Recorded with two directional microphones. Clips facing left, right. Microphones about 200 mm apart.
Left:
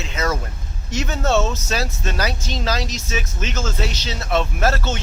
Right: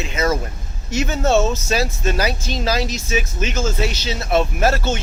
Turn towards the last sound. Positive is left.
turn(degrees=-10)  # may be behind; listen again after turning